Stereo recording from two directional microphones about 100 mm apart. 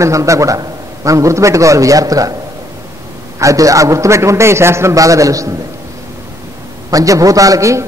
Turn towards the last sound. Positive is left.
turn(degrees=-35)  # may be behind; listen again after turning